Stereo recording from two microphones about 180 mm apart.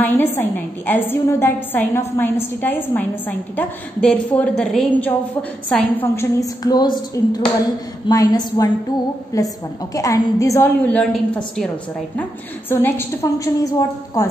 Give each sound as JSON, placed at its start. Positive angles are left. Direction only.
{"t": 0.0, "sound": "a woman's voice", "side_deg": 10}
{"t": 6.6, "sound": "a woman's voice", "side_deg": 20}